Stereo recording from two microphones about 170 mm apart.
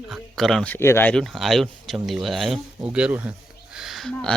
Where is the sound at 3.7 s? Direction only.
Centre (ahead or behind).